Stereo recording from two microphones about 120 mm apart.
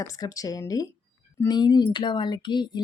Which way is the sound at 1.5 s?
35° left (ahead or behind).